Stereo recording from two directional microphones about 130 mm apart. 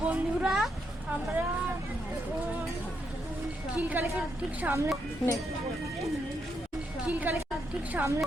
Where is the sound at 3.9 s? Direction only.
15° right (ahead or behind).